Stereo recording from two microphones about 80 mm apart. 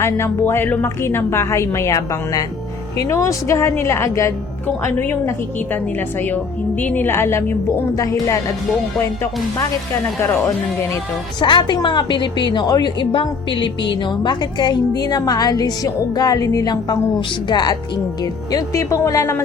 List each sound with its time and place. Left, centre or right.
0.0 s a woman's voice: left
4.8 s a woman's voice: left
6.2 s a woman's voice: left
7.9 s speech: left
10.2 s a woman's voice: left
11.3 s a woman's voice: left
13.0 s a woman's voice: left
17.2 s a woman's voice: left
18.7 s a woman's voice: left